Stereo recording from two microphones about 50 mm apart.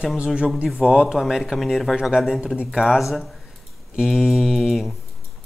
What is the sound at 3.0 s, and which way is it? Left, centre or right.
Mantra, centre.